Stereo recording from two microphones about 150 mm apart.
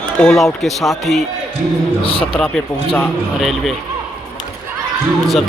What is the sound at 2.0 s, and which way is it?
Speech, 40° left (ahead or behind).